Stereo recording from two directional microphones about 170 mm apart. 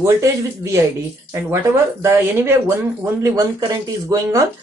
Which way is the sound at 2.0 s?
15° right (ahead or behind).